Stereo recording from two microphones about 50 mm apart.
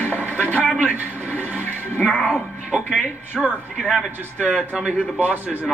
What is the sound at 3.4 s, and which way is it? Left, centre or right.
Speech, centre.